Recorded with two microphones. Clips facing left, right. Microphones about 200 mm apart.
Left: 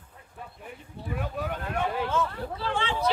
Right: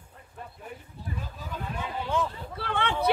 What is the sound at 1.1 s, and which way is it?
Vehicle, 65° left (ahead or behind).